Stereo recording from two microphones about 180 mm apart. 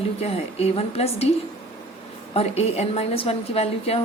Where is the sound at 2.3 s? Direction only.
35° left (ahead or behind).